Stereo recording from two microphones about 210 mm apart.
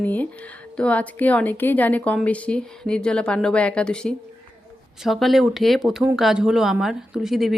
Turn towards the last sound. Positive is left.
turn(degrees=0)  # may be behind; listen again after turning